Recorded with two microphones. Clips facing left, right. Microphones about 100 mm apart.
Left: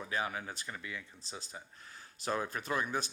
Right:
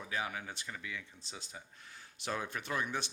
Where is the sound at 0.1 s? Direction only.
40° left (ahead or behind).